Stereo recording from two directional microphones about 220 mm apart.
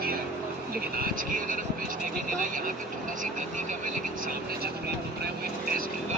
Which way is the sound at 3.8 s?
40° right (ahead or behind).